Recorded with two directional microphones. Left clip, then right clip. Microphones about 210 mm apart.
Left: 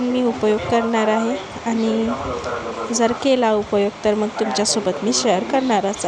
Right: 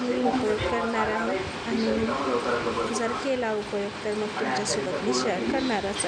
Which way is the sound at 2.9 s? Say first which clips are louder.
Left 10 dB; 35° left (ahead or behind).